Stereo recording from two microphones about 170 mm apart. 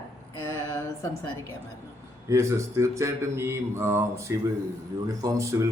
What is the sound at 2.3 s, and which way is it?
A man's voice, 15° right (ahead or behind).